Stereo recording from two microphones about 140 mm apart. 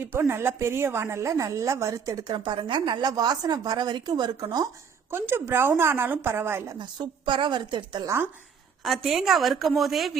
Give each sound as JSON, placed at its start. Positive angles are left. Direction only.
{"t": 0.0, "sound": "a woman's voice", "side_deg": -15}
{"t": 5.1, "sound": "a woman's voice", "side_deg": -15}
{"t": 6.7, "sound": "a woman's voice", "side_deg": -35}
{"t": 8.0, "sound": "a woman's voice", "side_deg": -20}
{"t": 8.8, "sound": "a woman's voice", "side_deg": 0}